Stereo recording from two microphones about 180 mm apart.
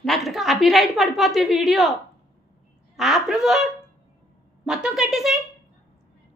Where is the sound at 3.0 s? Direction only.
Centre (ahead or behind).